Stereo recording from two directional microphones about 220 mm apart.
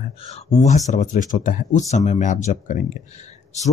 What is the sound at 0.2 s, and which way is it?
Speech, 30° left (ahead or behind).